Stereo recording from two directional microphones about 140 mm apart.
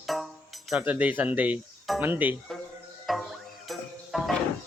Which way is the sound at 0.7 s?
10° right (ahead or behind).